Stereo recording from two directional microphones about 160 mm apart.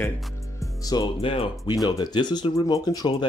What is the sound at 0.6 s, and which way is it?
Speech, 25° left (ahead or behind).